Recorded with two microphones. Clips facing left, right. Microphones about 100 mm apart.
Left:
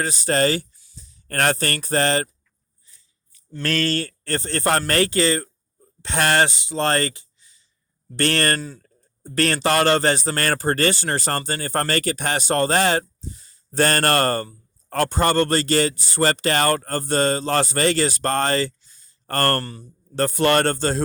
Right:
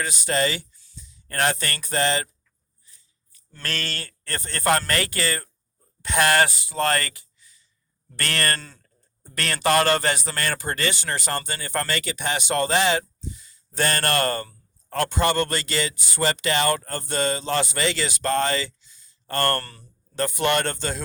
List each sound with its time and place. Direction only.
0.0 s speech: 35° left (ahead or behind)
3.6 s speech: 35° left (ahead or behind)